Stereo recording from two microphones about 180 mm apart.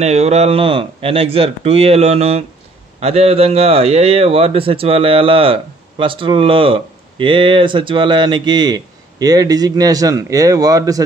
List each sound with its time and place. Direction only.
0.0 s a man's voice: 35° right (ahead or behind); by 11.0 s 20° right (ahead or behind)